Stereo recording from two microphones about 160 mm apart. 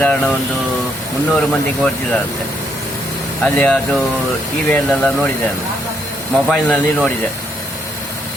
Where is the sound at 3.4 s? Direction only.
10° left (ahead or behind).